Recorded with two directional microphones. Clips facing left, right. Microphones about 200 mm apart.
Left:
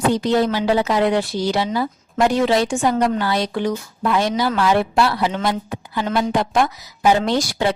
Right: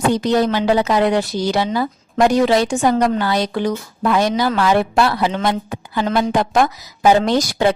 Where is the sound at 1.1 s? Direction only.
45° right (ahead or behind).